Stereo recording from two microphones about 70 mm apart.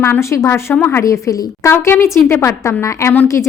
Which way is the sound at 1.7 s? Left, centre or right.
Left.